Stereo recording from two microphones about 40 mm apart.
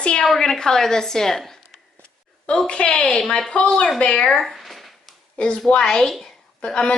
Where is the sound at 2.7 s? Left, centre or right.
Left.